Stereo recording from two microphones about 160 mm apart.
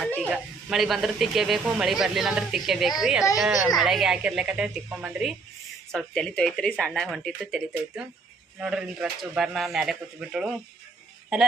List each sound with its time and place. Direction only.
0.2 s speech: centre (ahead or behind)